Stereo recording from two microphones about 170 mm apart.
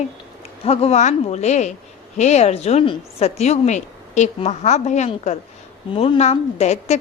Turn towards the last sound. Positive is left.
turn(degrees=40)  # may be behind; listen again after turning